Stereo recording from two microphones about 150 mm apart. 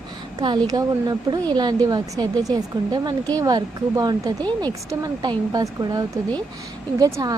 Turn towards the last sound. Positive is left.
turn(degrees=-25)  # may be behind; listen again after turning